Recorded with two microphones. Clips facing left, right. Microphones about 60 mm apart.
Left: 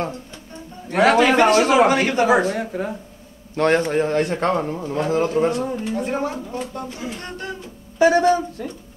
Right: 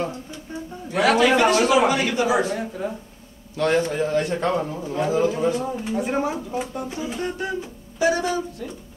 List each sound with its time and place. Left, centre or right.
0.9 s a man's voice: left
5.9 s speech: centre
8.0 s a man's voice: left